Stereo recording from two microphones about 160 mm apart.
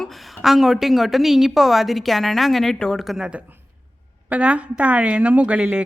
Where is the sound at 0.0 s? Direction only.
Centre (ahead or behind).